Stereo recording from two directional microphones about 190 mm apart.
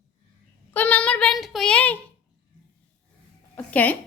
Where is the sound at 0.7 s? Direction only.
10° left (ahead or behind).